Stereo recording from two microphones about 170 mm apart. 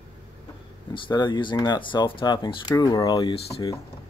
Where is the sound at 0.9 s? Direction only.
30° left (ahead or behind).